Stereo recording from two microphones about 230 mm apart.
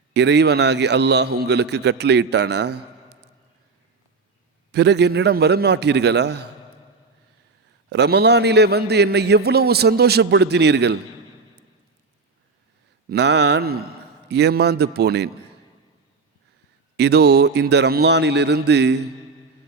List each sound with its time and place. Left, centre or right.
0.1 s a man's voice: right
4.7 s a man's voice: right
7.9 s a man's voice: right
13.1 s a man's voice: right
17.0 s a man's voice: right